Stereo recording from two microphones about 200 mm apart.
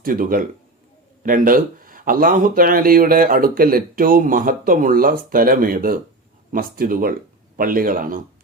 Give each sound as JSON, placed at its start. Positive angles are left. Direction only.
{"t": 0.0, "sound": "speech", "side_deg": -45}